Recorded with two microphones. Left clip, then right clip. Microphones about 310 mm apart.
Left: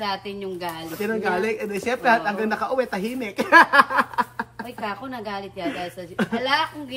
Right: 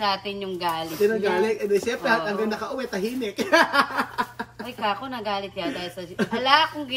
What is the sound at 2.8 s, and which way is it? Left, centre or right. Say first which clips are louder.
Speech: left 3 dB; centre.